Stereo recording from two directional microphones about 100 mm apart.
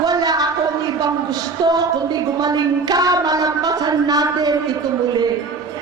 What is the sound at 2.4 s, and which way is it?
Speech, 40° right (ahead or behind).